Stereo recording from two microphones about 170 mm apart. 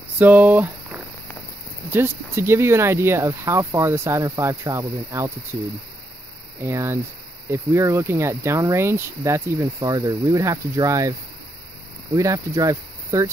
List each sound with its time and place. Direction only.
0.2 s speech: 10° right (ahead or behind)
6.6 s speech: 15° right (ahead or behind)
12.2 s speech: 20° right (ahead or behind)